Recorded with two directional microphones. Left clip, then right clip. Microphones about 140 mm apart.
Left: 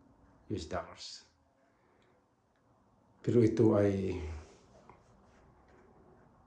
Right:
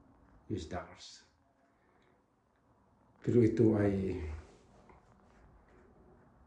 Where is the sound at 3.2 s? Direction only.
15° left (ahead or behind).